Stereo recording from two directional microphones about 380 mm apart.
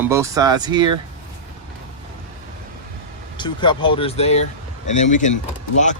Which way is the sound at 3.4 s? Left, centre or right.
Centre.